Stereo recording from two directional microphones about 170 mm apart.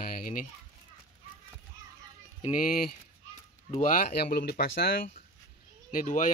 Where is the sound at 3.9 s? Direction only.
65° left (ahead or behind).